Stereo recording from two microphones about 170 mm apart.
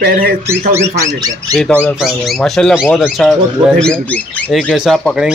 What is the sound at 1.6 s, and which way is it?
Speech, 10° left (ahead or behind).